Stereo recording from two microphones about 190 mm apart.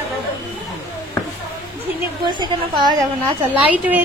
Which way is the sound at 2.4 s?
25° right (ahead or behind).